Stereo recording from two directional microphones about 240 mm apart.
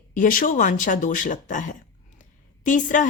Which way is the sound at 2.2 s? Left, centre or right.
Left.